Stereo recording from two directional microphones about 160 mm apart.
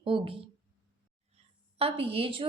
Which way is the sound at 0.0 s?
35° right (ahead or behind).